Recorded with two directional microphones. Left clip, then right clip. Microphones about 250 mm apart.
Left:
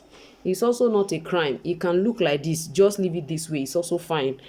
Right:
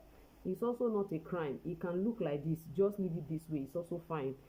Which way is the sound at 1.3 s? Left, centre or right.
Left.